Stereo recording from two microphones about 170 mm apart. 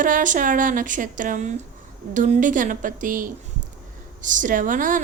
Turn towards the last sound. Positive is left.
turn(degrees=-50)  # may be behind; listen again after turning